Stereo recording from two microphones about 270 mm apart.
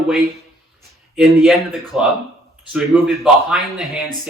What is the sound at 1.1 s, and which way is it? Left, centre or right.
A man's voice, centre.